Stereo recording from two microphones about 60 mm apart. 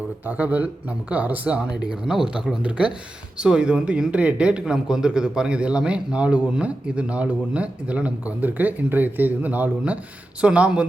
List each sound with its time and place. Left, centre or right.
0.3 s a man's voice: right